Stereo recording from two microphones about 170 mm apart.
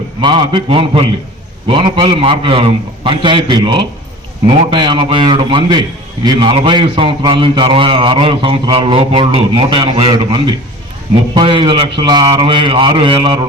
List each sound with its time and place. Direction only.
0.2 s a man's voice: 30° right (ahead or behind)